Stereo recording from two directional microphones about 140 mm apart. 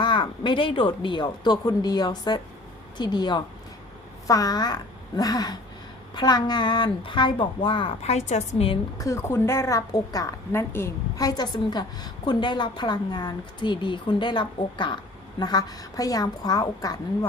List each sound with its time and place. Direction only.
0.0 s a woman's voice: 35° left (ahead or behind)
9.0 s a woman's voice: 20° left (ahead or behind)